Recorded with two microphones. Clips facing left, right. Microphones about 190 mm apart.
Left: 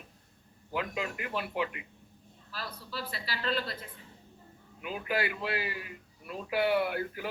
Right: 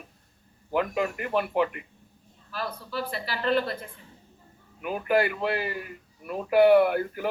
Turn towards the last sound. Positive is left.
turn(degrees=-50)  # may be behind; listen again after turning